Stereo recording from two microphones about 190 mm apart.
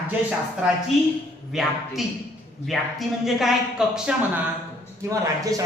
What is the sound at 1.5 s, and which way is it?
Speech, centre (ahead or behind).